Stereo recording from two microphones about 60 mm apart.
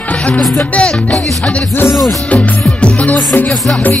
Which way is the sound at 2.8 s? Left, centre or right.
Centre.